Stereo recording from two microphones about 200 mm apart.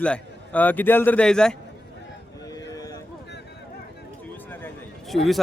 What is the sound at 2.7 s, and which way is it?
Boat, 20° left (ahead or behind).